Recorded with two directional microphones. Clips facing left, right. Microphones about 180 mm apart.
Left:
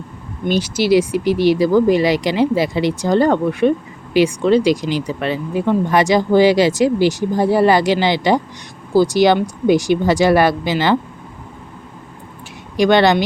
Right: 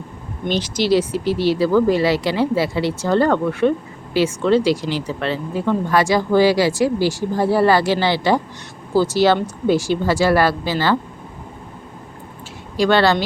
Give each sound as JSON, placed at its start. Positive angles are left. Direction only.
{"t": 0.4, "sound": "speech", "side_deg": 10}
{"t": 12.7, "sound": "speech", "side_deg": 20}